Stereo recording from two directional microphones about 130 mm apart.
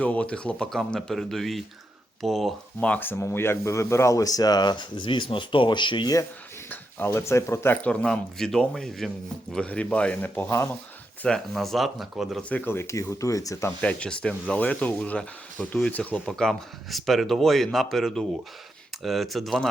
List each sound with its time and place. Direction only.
0.0 s speech: 10° left (ahead or behind); by 6.1 s 35° left (ahead or behind)
6.7 s speech: 20° left (ahead or behind)
8.0 s speech: 5° left (ahead or behind)
11.2 s speech: 5° left (ahead or behind); by 13.7 s 25° left (ahead or behind)
13.8 s speech: 10° left (ahead or behind)